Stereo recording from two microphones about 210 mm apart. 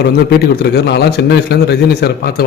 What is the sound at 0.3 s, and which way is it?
A man's voice, 50° left (ahead or behind).